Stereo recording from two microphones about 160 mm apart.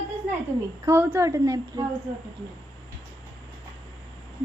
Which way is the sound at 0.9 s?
10° right (ahead or behind).